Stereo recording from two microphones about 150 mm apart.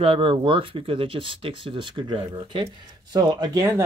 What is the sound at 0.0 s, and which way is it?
Speech, 35° right (ahead or behind).